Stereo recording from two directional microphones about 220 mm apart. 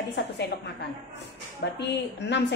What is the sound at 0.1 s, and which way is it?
A woman's voice, 50° left (ahead or behind).